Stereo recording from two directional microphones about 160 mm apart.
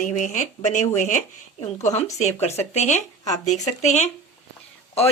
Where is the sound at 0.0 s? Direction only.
50° left (ahead or behind).